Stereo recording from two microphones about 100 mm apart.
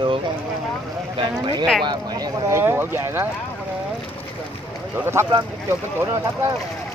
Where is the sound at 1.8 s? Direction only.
40° right (ahead or behind).